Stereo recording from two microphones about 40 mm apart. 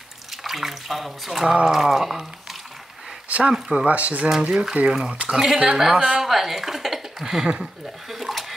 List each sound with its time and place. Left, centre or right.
0.3 s speech: centre
3.3 s a sound: right
3.8 s speech: right
4.3 s speech: centre
5.9 s a woman's voice: right
6.2 s speech: centre